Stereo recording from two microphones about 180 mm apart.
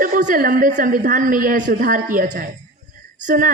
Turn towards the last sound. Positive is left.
turn(degrees=-50)  # may be behind; listen again after turning